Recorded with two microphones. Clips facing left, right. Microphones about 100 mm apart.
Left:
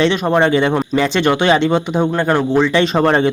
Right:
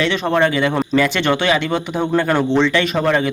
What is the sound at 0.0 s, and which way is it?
Speech, 20° left (ahead or behind).